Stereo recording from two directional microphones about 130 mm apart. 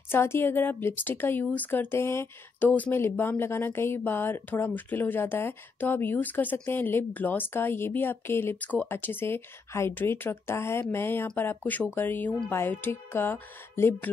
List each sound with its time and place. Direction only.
0.1 s a woman's voice: 20° left (ahead or behind)